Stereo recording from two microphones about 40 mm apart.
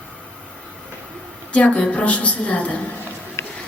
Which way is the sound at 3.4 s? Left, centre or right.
Left.